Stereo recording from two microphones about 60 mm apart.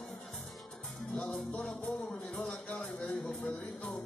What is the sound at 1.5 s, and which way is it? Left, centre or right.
Music, centre.